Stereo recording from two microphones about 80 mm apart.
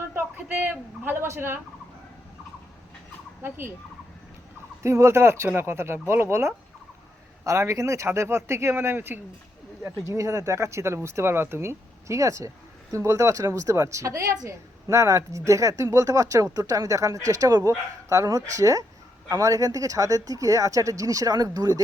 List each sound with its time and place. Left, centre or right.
0.3 s a man's voice: right
4.8 s speech: right
9.8 s speech: right